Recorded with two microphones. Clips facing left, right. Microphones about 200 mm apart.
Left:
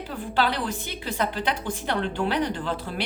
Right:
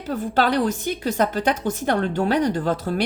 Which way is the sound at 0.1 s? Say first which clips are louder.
Right 6 dB; 45° right (ahead or behind).